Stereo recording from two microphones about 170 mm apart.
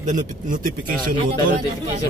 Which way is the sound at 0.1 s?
50° right (ahead or behind).